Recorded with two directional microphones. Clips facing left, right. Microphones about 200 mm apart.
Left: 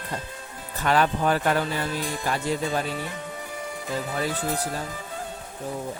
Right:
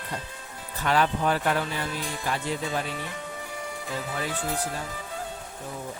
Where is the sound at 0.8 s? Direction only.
45° left (ahead or behind).